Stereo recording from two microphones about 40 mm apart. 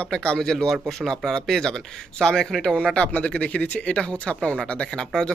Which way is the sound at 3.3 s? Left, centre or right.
Left.